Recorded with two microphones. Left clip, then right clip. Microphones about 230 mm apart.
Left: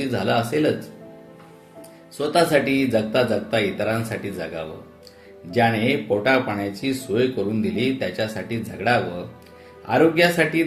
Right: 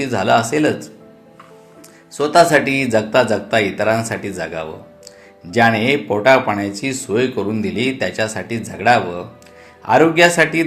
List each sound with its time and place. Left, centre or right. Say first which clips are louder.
0.0 s speech: right 7 dB; centre
2.1 s speech: right 7 dB; centre